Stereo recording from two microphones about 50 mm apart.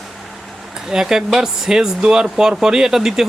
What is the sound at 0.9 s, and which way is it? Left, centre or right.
Speech, centre.